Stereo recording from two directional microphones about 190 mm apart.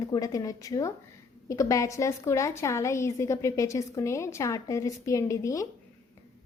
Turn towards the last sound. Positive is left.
turn(degrees=15)  # may be behind; listen again after turning